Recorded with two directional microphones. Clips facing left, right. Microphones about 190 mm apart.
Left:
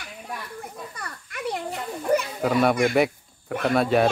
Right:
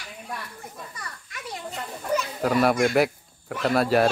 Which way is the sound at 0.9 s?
55° left (ahead or behind).